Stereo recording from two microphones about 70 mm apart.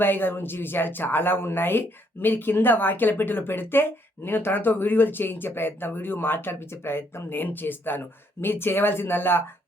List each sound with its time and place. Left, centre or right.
0.0 s speech: left